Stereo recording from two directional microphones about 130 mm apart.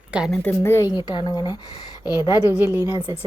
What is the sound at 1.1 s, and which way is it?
Speech, 35° left (ahead or behind).